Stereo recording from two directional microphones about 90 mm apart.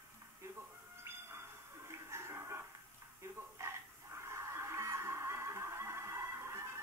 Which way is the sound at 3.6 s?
30° right (ahead or behind).